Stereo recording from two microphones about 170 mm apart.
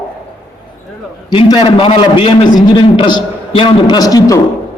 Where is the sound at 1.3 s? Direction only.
25° left (ahead or behind).